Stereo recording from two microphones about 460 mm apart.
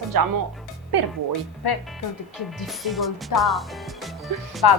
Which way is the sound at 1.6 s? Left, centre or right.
Left.